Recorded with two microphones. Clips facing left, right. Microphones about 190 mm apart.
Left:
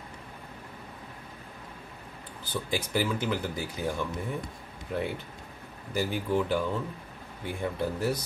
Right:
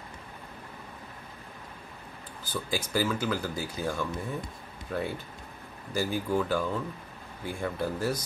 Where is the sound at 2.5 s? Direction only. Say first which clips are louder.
Even; 20° left (ahead or behind).